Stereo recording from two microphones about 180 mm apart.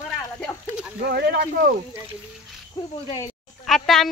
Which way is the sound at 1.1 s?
65° right (ahead or behind).